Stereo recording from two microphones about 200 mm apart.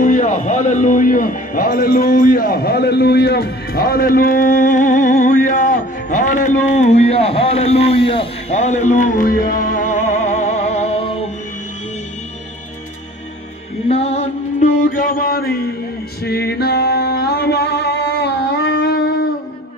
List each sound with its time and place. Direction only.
0.0 s a man's voice: 40° left (ahead or behind)
13.8 s mantra: 30° left (ahead or behind); by 15.7 s 50° left (ahead or behind)
16.3 s music: 55° left (ahead or behind)